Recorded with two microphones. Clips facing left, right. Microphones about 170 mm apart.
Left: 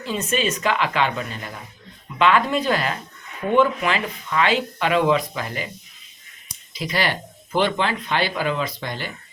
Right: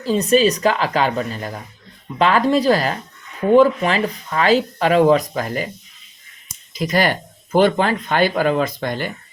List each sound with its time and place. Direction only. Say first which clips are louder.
0.0 s speech: right 8 dB; 35° right (ahead or behind)